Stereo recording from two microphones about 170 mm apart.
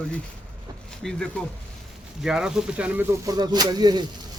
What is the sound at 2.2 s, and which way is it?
Speech, 5° right (ahead or behind).